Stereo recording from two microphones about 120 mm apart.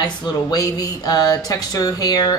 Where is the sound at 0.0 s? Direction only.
35° left (ahead or behind).